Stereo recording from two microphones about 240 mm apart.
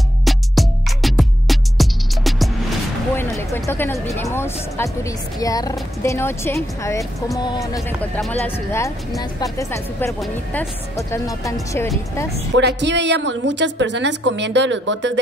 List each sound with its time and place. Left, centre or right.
0.2 s music: centre
3.2 s speech: centre
12.5 s a woman's voice: right